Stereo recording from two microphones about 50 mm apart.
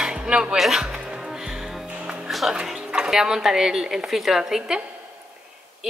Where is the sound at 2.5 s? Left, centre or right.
Centre.